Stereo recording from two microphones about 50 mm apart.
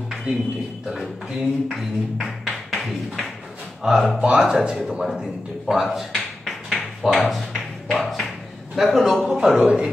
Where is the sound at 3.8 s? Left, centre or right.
Centre.